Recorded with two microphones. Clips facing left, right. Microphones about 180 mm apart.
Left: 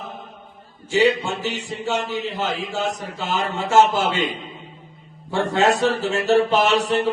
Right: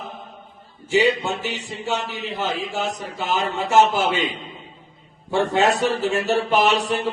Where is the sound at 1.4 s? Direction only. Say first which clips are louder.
Left 1 dB; 15° right (ahead or behind).